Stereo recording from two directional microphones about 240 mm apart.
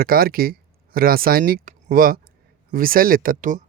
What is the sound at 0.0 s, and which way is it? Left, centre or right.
Speech, right.